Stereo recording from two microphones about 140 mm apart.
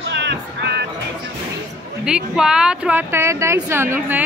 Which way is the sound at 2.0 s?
5° right (ahead or behind).